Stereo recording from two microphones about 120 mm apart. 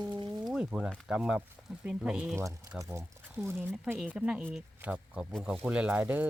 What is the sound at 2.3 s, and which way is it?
Speech, 25° right (ahead or behind).